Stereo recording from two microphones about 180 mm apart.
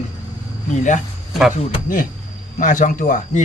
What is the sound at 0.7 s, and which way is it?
Speech, 40° left (ahead or behind).